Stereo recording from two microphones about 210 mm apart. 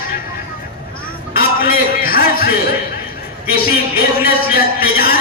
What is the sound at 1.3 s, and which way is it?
Music, 45° left (ahead or behind).